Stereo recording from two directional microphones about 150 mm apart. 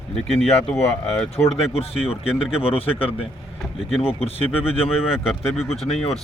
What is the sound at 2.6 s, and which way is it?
Speech, 40° left (ahead or behind).